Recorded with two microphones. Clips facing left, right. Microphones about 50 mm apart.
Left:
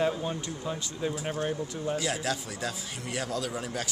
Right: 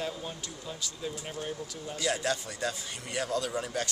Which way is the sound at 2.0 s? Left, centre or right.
Centre.